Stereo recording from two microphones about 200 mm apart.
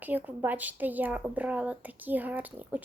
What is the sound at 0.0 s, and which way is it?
A woman's voice, 10° right (ahead or behind).